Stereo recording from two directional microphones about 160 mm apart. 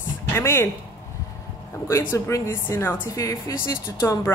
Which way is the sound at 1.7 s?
20° left (ahead or behind).